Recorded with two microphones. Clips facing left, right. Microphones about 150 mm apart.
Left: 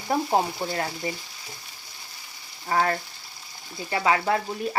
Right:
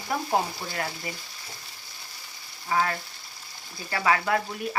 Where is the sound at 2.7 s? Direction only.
40° left (ahead or behind).